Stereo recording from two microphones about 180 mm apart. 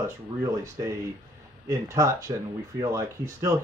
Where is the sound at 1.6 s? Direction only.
15° right (ahead or behind).